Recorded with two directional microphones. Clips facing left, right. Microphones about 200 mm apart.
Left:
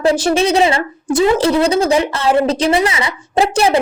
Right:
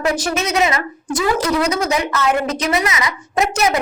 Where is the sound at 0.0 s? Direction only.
30° left (ahead or behind).